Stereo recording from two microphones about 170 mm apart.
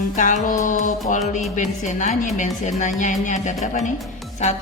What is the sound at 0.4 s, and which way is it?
Music, 50° left (ahead or behind).